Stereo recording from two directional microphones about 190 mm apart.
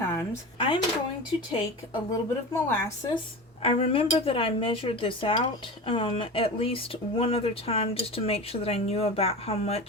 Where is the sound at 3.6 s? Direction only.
30° left (ahead or behind).